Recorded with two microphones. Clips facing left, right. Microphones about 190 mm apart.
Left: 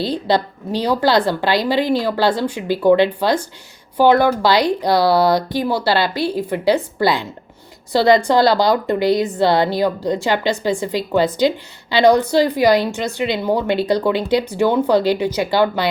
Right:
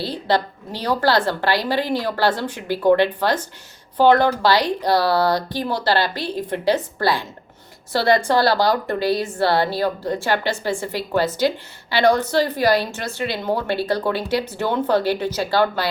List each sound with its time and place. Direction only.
0.0 s a woman's voice: 15° left (ahead or behind)